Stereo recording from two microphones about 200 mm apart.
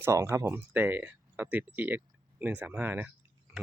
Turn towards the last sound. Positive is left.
turn(degrees=-10)  # may be behind; listen again after turning